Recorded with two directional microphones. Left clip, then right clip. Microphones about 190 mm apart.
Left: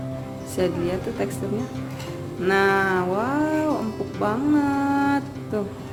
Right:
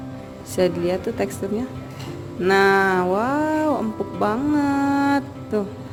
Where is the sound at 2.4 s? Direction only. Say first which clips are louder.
Right 3 dB; 45° right (ahead or behind).